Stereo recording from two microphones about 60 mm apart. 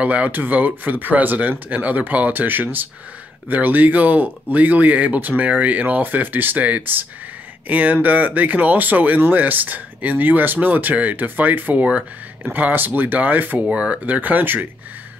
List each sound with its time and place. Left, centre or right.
0.0 s speech: right
13.7 s speech: centre